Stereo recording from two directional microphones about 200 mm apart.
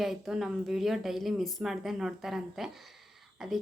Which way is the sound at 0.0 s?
Centre (ahead or behind).